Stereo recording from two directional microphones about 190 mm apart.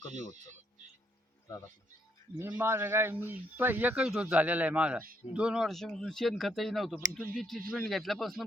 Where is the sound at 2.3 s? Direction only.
10° right (ahead or behind).